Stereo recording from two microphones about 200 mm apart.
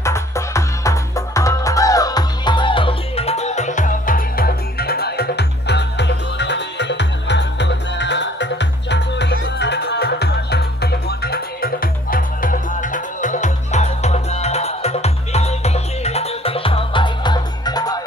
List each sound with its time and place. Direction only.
0.0 s music: 15° left (ahead or behind)